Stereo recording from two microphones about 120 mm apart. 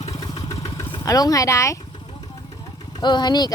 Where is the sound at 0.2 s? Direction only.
30° left (ahead or behind).